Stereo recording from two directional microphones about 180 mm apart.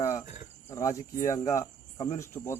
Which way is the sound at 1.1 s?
45° left (ahead or behind).